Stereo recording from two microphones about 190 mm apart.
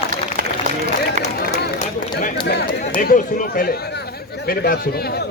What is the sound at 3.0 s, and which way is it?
A man's voice, 45° left (ahead or behind).